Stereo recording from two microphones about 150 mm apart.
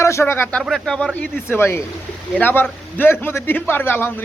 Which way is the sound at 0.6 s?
5° left (ahead or behind).